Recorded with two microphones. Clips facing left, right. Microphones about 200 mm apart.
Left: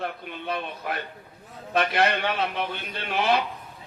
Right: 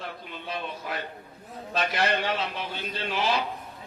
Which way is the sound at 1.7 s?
60° left (ahead or behind).